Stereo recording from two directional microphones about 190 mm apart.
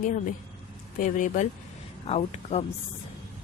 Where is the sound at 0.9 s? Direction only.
45° left (ahead or behind).